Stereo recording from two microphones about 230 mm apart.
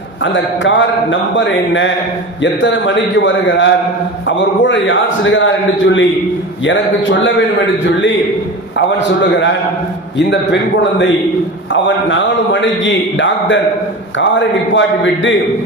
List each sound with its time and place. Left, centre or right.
0.2 s a man's voice: left
9.0 s a man's voice: left